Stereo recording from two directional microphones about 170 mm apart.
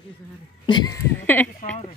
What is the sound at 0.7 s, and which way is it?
Speech, 25° left (ahead or behind).